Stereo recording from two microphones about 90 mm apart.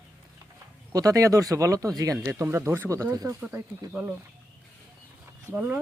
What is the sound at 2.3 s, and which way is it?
Speech, 30° right (ahead or behind).